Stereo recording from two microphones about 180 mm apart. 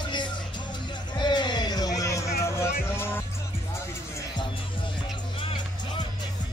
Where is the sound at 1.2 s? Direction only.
25° left (ahead or behind).